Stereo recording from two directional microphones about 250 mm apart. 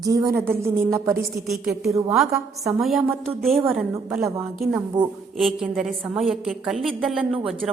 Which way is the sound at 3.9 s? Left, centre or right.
Centre.